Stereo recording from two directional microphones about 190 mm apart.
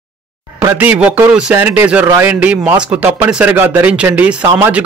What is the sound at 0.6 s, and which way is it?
Speech, 10° right (ahead or behind).